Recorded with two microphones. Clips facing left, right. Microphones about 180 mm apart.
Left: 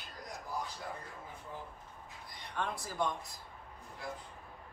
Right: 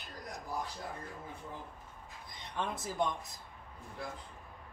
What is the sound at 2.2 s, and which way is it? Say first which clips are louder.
Speech: even; 20° right (ahead or behind).